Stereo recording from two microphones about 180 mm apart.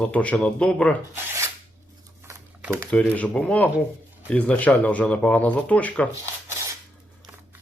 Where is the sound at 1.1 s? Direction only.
10° right (ahead or behind).